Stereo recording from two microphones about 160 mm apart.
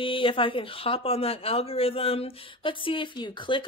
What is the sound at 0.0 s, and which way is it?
Speech, 35° left (ahead or behind).